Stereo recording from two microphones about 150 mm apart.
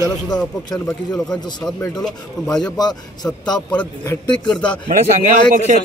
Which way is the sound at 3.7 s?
15° left (ahead or behind).